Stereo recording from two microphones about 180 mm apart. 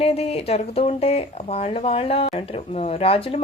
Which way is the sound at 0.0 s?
35° left (ahead or behind).